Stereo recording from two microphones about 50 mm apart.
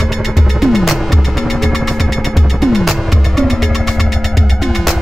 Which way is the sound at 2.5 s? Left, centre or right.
Centre.